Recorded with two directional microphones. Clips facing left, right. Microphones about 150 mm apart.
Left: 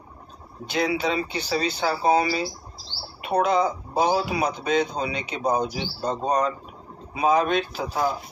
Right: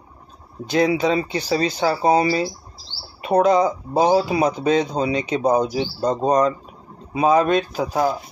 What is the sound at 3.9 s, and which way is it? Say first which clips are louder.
Speech: right 6 dB; 30° right (ahead or behind).